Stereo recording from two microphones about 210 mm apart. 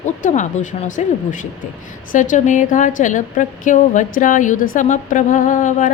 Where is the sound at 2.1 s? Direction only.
40° left (ahead or behind).